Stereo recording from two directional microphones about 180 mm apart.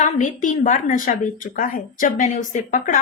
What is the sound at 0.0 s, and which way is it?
A woman's voice, 45° left (ahead or behind).